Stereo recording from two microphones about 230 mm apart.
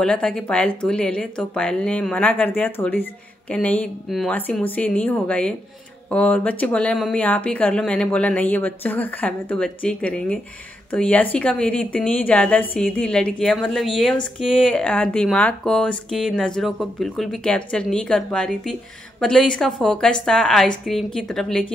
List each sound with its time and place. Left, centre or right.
0.0 s a woman's voice: centre